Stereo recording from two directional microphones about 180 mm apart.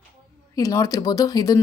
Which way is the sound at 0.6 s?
20° left (ahead or behind).